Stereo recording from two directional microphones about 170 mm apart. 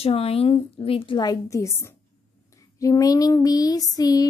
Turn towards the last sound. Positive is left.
turn(degrees=20)  # may be behind; listen again after turning